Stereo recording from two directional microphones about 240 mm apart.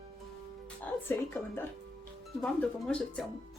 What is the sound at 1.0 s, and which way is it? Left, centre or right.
Speech, centre.